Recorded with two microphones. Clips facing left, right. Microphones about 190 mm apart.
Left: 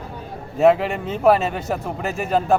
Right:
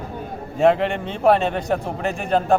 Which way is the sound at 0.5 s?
Centre (ahead or behind).